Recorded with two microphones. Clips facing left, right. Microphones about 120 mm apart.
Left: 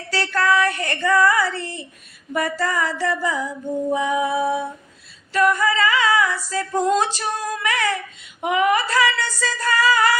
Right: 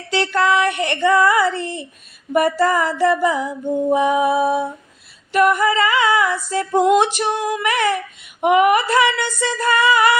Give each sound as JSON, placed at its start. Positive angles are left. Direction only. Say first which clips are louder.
{"t": 0.1, "sound": "music", "louder": "right 3 dB", "side_deg": -20}